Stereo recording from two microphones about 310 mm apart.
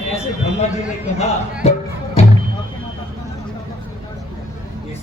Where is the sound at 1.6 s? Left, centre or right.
Left.